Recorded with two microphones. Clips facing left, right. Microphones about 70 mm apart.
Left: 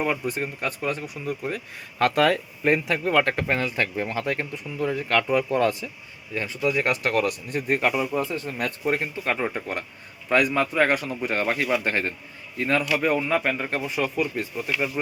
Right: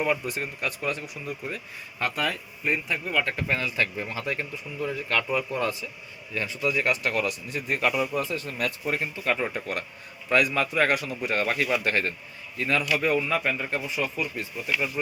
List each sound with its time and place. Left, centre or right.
0.0 s speech: left
3.4 s speech: left
6.3 s a man's voice: left